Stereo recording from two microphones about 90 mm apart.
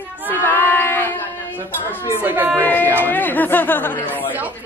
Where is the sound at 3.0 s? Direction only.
20° left (ahead or behind).